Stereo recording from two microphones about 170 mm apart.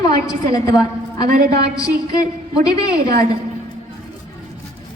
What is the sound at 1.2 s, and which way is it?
Speech, 70° right (ahead or behind).